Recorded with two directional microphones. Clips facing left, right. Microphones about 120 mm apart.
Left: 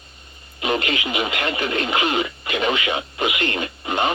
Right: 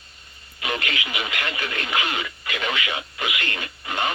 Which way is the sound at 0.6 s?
25° left (ahead or behind).